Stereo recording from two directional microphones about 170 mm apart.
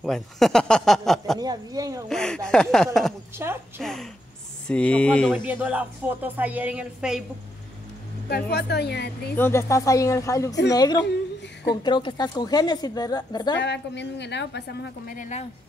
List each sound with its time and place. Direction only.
0.0 s speech: centre (ahead or behind)
1.4 s speech: 20° right (ahead or behind)
2.0 s speech: 5° left (ahead or behind)
3.3 s speech: 15° right (ahead or behind)
3.8 s speech: 5° left (ahead or behind)
5.4 s speech: 10° right (ahead or behind)
8.3 s a woman's voice: 75° left (ahead or behind)
9.3 s a woman's voice: 15° left (ahead or behind)
13.6 s a woman's voice: 90° left
15.1 s speech: 45° left (ahead or behind)